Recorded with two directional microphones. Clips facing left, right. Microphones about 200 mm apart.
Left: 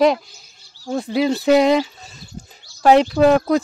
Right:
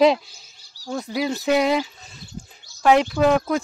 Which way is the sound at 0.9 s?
30° left (ahead or behind).